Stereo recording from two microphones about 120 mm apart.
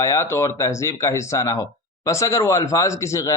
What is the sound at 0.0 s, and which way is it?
A man's voice, 25° left (ahead or behind).